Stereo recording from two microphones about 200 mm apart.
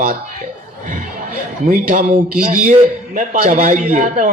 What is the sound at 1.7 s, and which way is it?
A man's voice, 40° right (ahead or behind).